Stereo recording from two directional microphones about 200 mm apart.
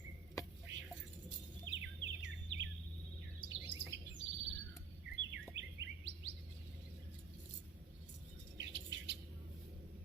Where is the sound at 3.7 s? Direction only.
60° right (ahead or behind).